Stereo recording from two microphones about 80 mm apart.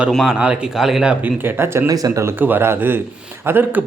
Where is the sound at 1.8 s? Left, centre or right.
Right.